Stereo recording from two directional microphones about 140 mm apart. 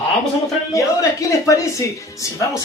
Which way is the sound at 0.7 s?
20° left (ahead or behind).